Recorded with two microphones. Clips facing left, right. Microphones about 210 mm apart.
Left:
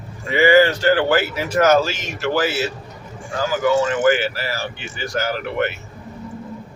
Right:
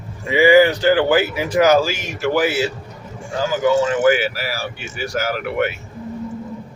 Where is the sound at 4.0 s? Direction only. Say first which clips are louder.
Right 1 dB; 10° right (ahead or behind).